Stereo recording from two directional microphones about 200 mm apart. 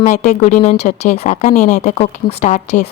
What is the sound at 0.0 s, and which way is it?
Speech, 35° left (ahead or behind).